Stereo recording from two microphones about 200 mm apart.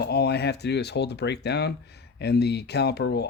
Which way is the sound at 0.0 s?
55° left (ahead or behind).